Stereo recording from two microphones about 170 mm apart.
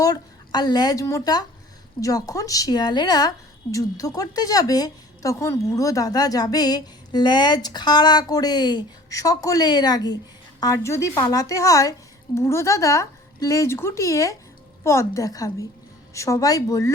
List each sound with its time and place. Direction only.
0.0 s a woman's voice: 20° left (ahead or behind)